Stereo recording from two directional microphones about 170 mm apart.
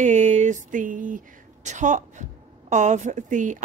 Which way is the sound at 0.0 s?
45° right (ahead or behind).